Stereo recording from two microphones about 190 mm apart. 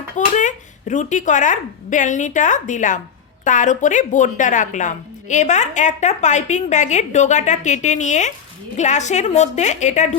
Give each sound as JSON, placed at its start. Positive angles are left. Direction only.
{"t": 0.3, "sound": "a woman's voice", "side_deg": 40}